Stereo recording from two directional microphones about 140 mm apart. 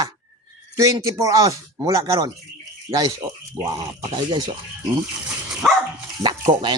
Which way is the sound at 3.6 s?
30° right (ahead or behind).